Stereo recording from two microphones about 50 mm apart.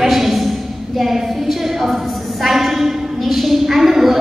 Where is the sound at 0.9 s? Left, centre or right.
Centre.